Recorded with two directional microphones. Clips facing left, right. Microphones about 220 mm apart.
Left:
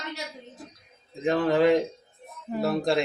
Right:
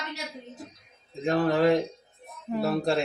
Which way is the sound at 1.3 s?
15° left (ahead or behind).